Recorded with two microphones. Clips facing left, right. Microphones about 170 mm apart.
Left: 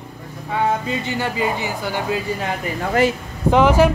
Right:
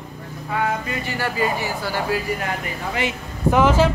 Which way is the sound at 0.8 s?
20° left (ahead or behind).